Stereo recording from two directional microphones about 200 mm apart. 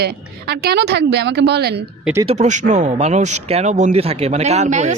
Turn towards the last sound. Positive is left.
turn(degrees=-35)  # may be behind; listen again after turning